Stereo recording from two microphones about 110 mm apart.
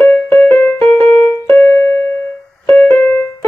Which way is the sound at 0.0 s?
10° left (ahead or behind).